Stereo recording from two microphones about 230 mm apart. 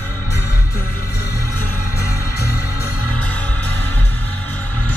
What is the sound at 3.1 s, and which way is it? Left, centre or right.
Music, centre.